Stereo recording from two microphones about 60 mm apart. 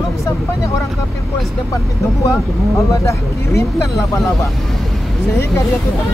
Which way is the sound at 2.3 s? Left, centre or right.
Left.